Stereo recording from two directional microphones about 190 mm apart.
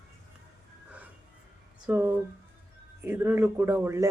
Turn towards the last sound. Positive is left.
turn(degrees=-15)  # may be behind; listen again after turning